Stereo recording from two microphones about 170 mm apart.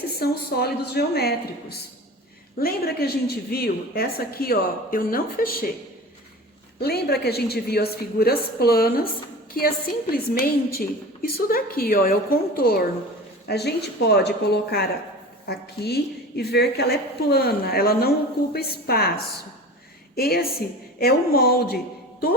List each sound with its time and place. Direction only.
0.1 s a woman's voice: 65° left (ahead or behind)
2.6 s a woman's voice: 65° left (ahead or behind)
6.7 s a woman's voice: 70° left (ahead or behind)